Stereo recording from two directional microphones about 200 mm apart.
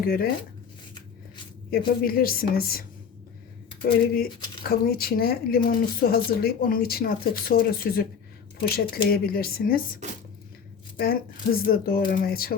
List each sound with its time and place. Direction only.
0.0 s speech: 50° left (ahead or behind)
2.0 s speech: 45° left (ahead or behind)
4.0 s speech: 50° left (ahead or behind)